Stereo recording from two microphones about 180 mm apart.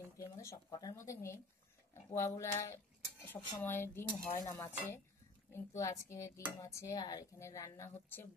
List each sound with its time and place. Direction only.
0.2 s cutlery: 15° left (ahead or behind)